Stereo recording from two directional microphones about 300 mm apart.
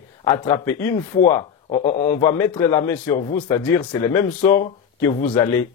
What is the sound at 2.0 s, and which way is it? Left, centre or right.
Speech, centre.